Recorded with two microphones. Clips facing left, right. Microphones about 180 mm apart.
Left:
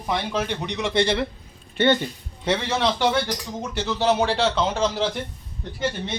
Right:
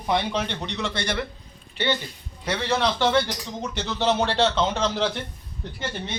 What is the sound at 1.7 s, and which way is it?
Speech, 50° left (ahead or behind).